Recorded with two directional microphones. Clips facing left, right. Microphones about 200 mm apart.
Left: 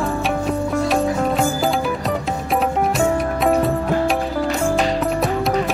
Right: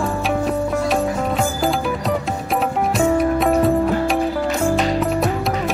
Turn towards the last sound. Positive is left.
turn(degrees=0)  # may be behind; listen again after turning